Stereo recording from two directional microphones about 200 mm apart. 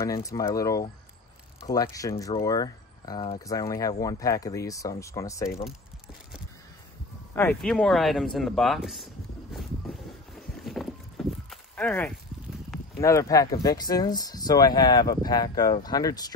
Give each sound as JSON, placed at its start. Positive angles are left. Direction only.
{"t": 0.0, "sound": "speech", "side_deg": 15}
{"t": 7.3, "sound": "speech", "side_deg": 10}
{"t": 10.6, "sound": "walk", "side_deg": 0}
{"t": 13.0, "sound": "speech", "side_deg": 15}